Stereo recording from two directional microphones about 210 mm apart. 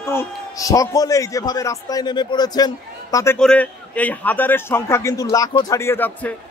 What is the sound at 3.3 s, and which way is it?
A man's voice, 5° left (ahead or behind).